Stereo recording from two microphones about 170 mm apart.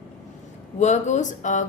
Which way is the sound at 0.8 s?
45° left (ahead or behind).